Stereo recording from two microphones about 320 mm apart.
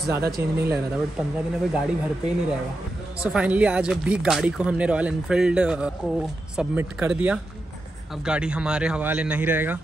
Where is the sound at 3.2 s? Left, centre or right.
Centre.